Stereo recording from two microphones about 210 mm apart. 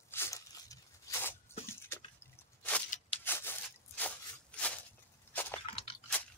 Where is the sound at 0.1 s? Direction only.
15° left (ahead or behind).